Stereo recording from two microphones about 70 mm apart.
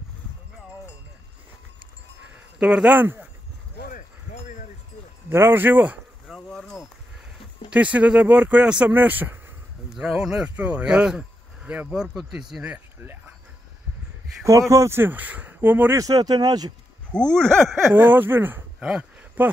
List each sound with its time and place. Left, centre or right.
2.3 s a sound: centre
3.0 s speech: right
5.3 s speech: right
6.2 s a sound: centre
7.7 s speech: centre
8.9 s speech: right
9.9 s speech: centre
12.1 s speech: centre
14.4 s speech: right
16.0 s speech: right
17.1 s speech: centre
17.9 s speech: right
18.8 s speech: centre
19.4 s speech: right